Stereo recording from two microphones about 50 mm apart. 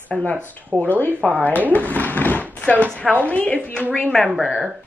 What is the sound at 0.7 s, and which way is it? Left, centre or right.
Speech, right.